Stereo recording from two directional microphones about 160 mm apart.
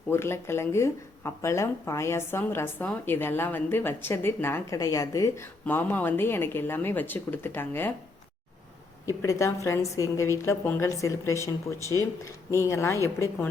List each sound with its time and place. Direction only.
0.1 s speech: 15° left (ahead or behind)
9.0 s a woman's voice: 20° left (ahead or behind)